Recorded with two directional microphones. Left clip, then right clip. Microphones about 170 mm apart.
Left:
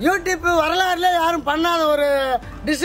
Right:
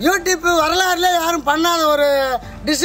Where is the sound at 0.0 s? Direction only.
5° left (ahead or behind).